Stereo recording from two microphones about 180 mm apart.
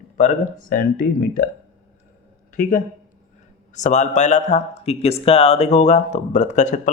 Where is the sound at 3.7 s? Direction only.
40° left (ahead or behind).